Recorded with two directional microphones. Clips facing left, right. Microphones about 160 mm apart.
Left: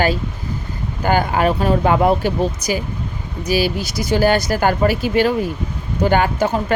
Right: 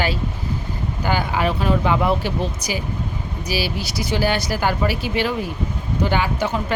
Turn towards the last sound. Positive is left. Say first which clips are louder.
# left 4 dB
turn(degrees=45)  # may be behind; listen again after turning